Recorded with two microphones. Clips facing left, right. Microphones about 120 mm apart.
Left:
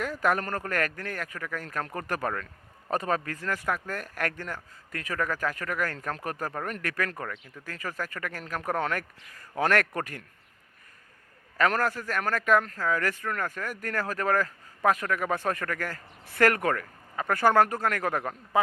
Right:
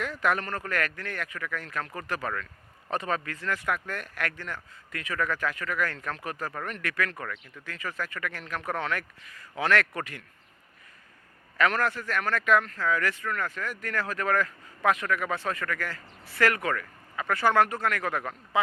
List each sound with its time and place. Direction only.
0.0 s a man's voice: 40° left (ahead or behind)
6.5 s a man's voice: 30° left (ahead or behind)
6.7 s a man's voice: 40° left (ahead or behind)
11.5 s a man's voice: 40° left (ahead or behind)